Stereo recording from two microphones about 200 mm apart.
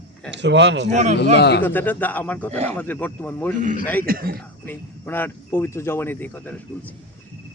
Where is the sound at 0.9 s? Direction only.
35° right (ahead or behind).